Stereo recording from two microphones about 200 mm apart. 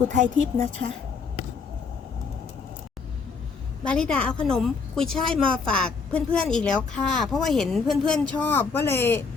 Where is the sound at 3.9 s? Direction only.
5° left (ahead or behind).